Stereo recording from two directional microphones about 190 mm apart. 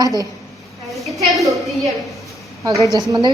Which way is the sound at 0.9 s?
Centre (ahead or behind).